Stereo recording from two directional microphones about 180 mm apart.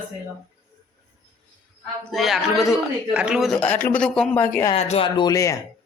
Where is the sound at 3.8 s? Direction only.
5° left (ahead or behind).